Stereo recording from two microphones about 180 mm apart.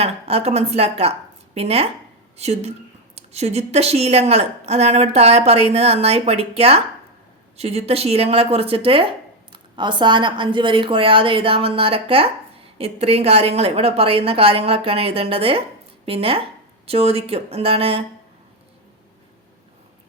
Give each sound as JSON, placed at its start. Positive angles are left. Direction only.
{"t": 0.0, "sound": "a woman's voice", "side_deg": -35}